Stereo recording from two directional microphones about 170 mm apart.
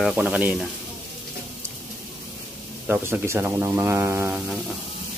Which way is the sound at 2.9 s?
15° right (ahead or behind).